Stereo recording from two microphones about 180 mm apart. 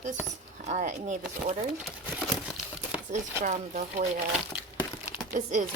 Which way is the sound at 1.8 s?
Centre (ahead or behind).